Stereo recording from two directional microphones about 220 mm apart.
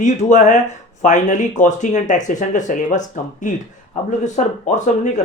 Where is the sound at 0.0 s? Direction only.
35° left (ahead or behind).